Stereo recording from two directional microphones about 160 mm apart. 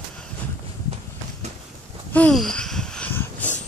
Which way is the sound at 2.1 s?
5° left (ahead or behind).